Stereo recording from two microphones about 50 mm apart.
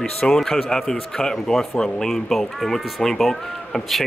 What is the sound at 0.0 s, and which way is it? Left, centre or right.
A man's voice, centre.